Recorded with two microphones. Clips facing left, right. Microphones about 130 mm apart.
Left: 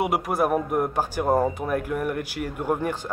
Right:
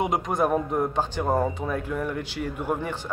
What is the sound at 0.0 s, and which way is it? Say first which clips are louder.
Speech: left 1 dB; 10° left (ahead or behind).